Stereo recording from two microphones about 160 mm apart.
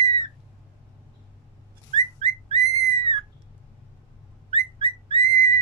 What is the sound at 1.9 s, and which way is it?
Whistling, 40° right (ahead or behind).